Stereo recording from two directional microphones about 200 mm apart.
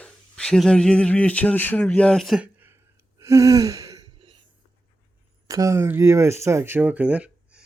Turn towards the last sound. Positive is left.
turn(degrees=-5)  # may be behind; listen again after turning